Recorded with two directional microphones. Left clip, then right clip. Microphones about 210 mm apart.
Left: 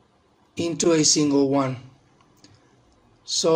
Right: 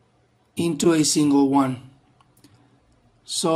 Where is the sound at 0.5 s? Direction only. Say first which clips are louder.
Right 1 dB; 45° right (ahead or behind).